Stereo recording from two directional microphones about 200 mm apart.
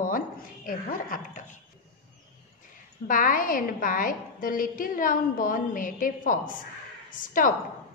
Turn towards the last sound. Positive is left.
turn(degrees=45)  # may be behind; listen again after turning